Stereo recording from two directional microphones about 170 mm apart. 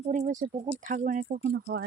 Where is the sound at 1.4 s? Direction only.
75° right (ahead or behind).